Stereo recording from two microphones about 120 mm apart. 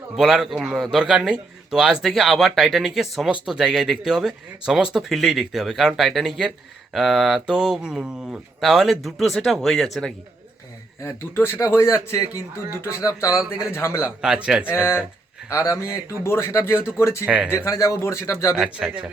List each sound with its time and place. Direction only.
0.2 s a man's voice: 5° right (ahead or behind)
11.0 s speech: 20° left (ahead or behind)
14.2 s speech: 5° right (ahead or behind)
14.7 s speech: 20° left (ahead or behind)
17.2 s speech: 10° right (ahead or behind)
17.5 s speech: 20° left (ahead or behind)
18.5 s speech: 5° right (ahead or behind)